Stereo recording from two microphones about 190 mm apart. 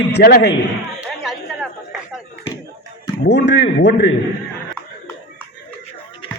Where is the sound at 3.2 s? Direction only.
65° left (ahead or behind).